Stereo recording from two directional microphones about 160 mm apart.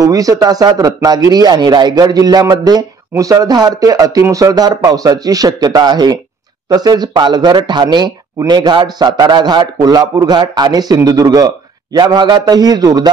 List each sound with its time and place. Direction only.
0.0 s a man's voice: 20° right (ahead or behind)